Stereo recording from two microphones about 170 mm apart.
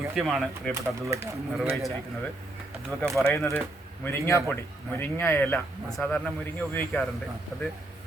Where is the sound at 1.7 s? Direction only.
Centre (ahead or behind).